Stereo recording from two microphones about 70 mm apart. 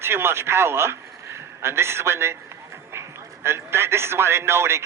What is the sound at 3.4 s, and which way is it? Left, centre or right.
Speech, right.